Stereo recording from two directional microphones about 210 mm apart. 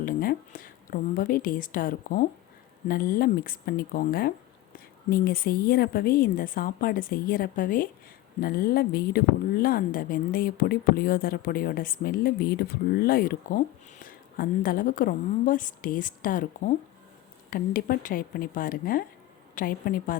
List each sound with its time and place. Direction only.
0.0 s a woman's voice: 45° left (ahead or behind)